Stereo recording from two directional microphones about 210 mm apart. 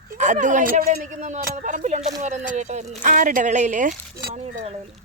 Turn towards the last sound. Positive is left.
turn(degrees=-30)  # may be behind; listen again after turning